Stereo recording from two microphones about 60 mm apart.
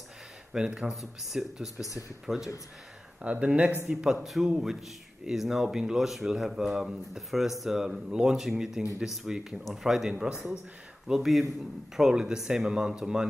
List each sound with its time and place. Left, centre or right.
0.5 s speech: centre
3.2 s speech: right
3.9 s speech: centre